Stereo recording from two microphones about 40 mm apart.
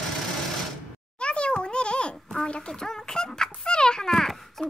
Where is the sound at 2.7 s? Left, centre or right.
Centre.